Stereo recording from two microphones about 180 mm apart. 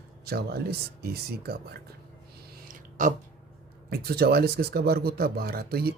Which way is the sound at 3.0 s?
45° right (ahead or behind).